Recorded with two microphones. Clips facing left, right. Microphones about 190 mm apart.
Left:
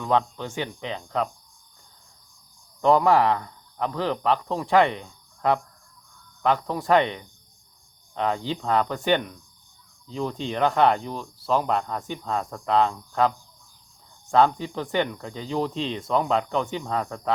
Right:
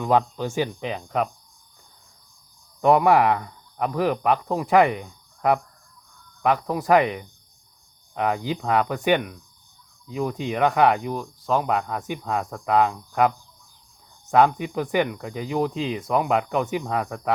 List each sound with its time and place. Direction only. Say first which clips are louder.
0.0 s speech: right 3 dB; 15° right (ahead or behind)
2.8 s speech: right 2 dB; 10° right (ahead or behind)
14.3 s speech: right 2 dB; 15° right (ahead or behind)